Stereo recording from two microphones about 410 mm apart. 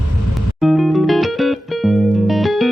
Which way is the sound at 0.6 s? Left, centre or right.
Centre.